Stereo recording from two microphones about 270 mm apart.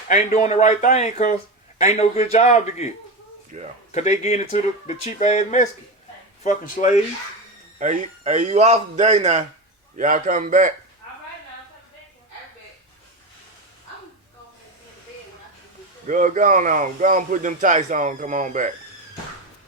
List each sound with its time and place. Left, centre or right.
0.1 s speech: left
3.5 s speech: right
3.9 s speech: left
7.8 s speech: right
16.0 s speech: right